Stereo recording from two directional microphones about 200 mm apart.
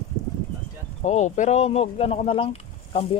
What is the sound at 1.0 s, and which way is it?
Speech, 35° left (ahead or behind).